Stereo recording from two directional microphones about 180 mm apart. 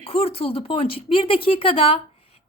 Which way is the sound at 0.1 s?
35° left (ahead or behind).